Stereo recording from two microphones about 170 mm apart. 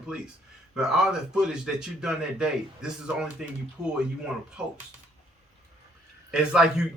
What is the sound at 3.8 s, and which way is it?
Speech, 20° right (ahead or behind).